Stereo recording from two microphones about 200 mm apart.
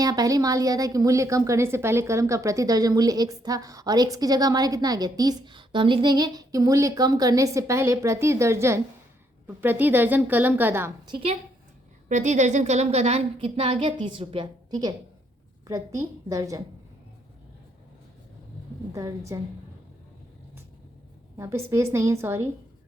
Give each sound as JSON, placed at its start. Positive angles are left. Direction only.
{"t": 0.0, "sound": "a woman's voice", "side_deg": -20}
{"t": 11.1, "sound": "a woman's voice", "side_deg": -30}
{"t": 18.9, "sound": "a woman's voice", "side_deg": -15}
{"t": 21.3, "sound": "a woman's voice", "side_deg": -15}